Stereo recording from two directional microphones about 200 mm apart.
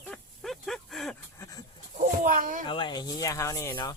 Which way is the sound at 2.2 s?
40° right (ahead or behind).